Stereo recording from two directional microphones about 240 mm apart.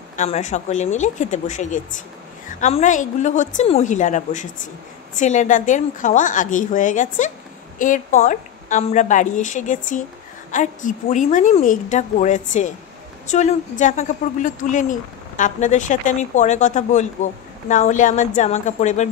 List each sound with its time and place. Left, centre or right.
0.1 s a woman's voice: left